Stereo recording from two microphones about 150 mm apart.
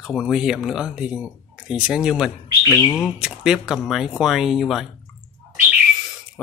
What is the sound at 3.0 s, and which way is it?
Speech, 5° right (ahead or behind).